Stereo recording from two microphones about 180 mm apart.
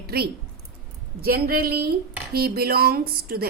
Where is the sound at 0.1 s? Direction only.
60° right (ahead or behind).